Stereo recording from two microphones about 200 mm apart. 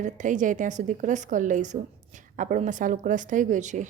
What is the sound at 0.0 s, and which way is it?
A woman's voice, 40° right (ahead or behind).